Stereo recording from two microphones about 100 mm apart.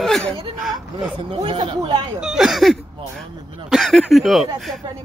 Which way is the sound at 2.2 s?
5° right (ahead or behind).